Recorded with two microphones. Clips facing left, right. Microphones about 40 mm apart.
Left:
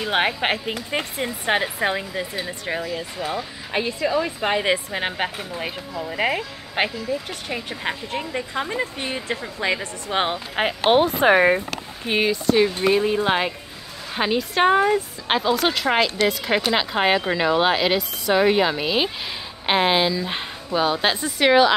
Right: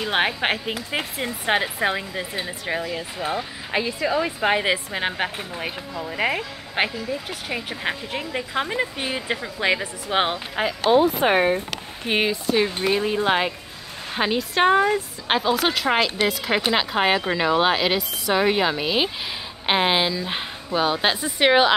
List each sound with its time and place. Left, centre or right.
0.0 s speech: centre
3.2 s speech: right
10.9 s speech: left
12.1 s speech: centre
12.9 s speech: centre
21.4 s speech: centre